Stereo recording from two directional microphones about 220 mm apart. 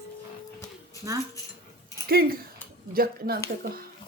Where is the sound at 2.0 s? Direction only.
45° right (ahead or behind).